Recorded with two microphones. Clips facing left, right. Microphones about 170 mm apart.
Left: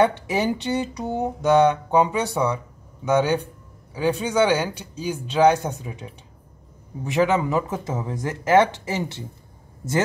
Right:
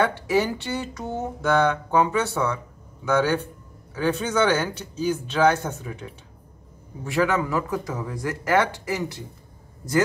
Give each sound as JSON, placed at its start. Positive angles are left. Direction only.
{"t": 0.0, "sound": "speech", "side_deg": 20}